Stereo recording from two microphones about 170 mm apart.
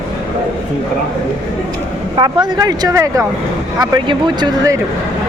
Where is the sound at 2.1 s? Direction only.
25° right (ahead or behind).